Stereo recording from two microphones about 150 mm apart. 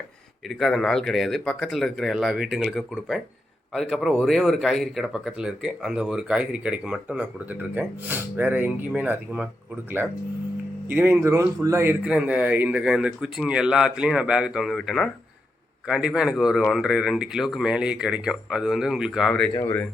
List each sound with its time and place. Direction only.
0.4 s speech: centre (ahead or behind)
10.8 s speech: 15° right (ahead or behind); by 19.5 s centre (ahead or behind)
19.5 s speech: 15° left (ahead or behind)